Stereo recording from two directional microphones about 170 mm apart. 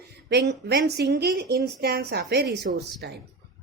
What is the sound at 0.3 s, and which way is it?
A woman's voice, 90° right.